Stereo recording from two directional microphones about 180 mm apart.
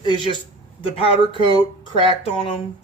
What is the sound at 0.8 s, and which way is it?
Speech, 30° left (ahead or behind).